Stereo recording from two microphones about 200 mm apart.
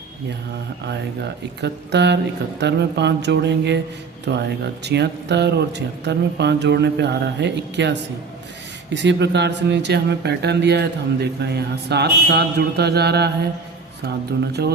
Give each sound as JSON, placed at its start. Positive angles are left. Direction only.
{"t": 1.6, "sound": "speech", "side_deg": -60}